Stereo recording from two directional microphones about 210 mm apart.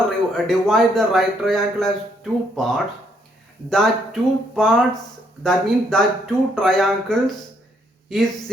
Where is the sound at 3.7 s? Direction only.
Centre (ahead or behind).